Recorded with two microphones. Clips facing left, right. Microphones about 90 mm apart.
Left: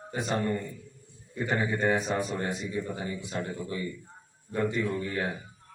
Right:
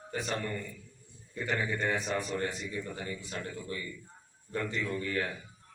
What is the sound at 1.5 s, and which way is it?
Speech, 40° left (ahead or behind).